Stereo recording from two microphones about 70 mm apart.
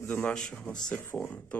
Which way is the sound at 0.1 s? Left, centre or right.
Centre.